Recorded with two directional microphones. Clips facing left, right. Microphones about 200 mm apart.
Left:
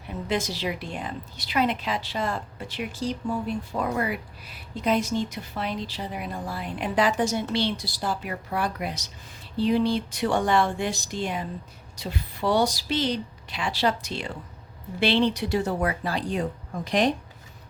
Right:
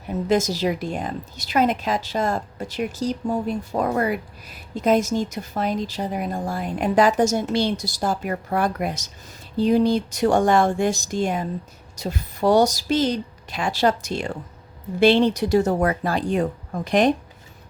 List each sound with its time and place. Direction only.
0.1 s a woman's voice: 45° right (ahead or behind)